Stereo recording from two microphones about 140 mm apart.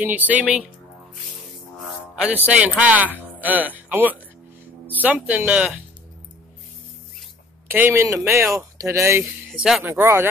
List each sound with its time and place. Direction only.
0.0 s speech: 10° right (ahead or behind)
2.4 s speech: 10° right (ahead or behind)
7.7 s speech: 15° right (ahead or behind)
9.5 s speech: 5° right (ahead or behind)
9.8 s speech: 20° right (ahead or behind)